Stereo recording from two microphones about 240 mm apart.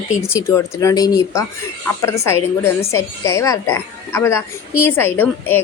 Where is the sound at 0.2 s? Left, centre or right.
Centre.